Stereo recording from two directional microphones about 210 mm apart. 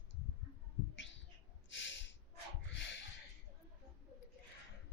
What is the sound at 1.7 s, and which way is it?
Snort, 60° left (ahead or behind).